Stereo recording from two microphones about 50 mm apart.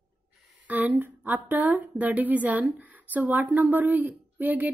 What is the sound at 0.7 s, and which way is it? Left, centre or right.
A woman's voice, right.